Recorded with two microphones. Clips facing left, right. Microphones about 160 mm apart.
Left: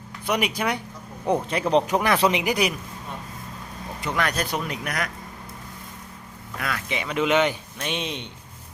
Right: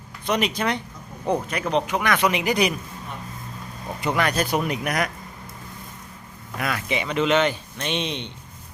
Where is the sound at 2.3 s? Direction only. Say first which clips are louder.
Right 1 dB; 10° left (ahead or behind).